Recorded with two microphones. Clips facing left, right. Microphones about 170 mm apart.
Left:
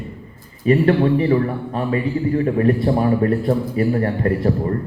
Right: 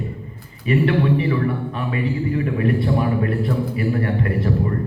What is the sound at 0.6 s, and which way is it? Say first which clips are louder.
A man's voice: left 3 dB; 35° left (ahead or behind).